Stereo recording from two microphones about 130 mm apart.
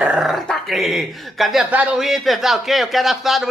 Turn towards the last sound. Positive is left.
turn(degrees=0)  # may be behind; listen again after turning